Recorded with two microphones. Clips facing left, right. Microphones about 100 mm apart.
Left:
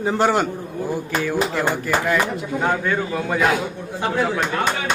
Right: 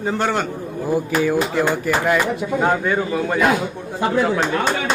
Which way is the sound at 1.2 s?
10° right (ahead or behind).